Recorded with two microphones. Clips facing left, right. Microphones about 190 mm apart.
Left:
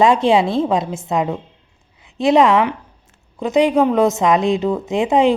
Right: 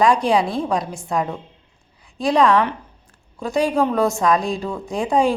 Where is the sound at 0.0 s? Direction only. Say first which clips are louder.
Left 3 dB; 25° left (ahead or behind).